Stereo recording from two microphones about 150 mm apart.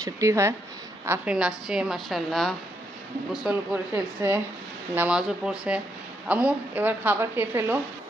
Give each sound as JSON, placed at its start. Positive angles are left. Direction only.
{"t": 0.0, "sound": "a woman's voice", "side_deg": -20}
{"t": 3.4, "sound": "speech", "side_deg": -10}